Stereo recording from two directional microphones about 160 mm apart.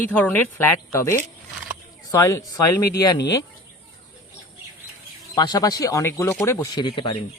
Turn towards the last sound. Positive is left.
turn(degrees=30)  # may be behind; listen again after turning